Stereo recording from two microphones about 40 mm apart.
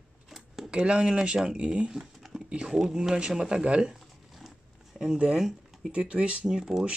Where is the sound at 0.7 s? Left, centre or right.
Right.